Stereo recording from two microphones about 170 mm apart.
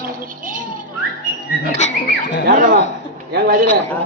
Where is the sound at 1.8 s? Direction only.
45° left (ahead or behind).